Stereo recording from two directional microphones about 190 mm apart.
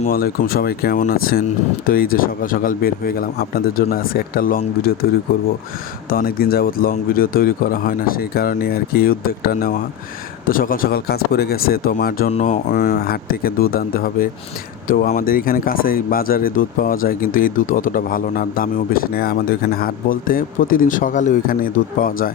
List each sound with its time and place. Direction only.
0.1 s speech: 50° left (ahead or behind)
6.1 s speech: 50° left (ahead or behind)
12.3 s speech: 40° left (ahead or behind)